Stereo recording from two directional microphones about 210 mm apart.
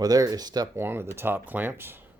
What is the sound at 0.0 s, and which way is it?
Speech, 20° right (ahead or behind).